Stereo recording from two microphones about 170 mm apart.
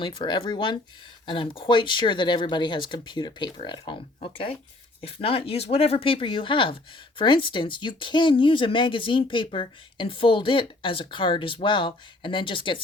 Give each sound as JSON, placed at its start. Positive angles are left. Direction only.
{"t": 0.0, "sound": "speech", "side_deg": 25}